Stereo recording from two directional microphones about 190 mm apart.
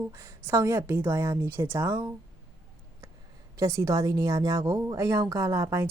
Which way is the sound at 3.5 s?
15° right (ahead or behind).